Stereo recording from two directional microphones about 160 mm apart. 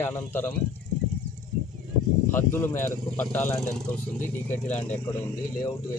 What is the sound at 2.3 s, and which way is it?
Speech, 15° left (ahead or behind).